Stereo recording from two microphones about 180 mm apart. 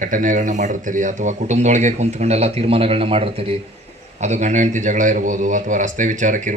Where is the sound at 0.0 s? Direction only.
45° right (ahead or behind).